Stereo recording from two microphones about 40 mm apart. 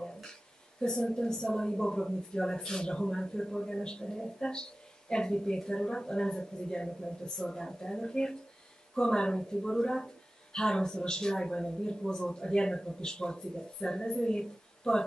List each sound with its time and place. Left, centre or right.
0.8 s speech: centre